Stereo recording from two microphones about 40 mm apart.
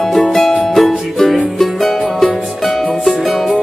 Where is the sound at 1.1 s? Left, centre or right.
Centre.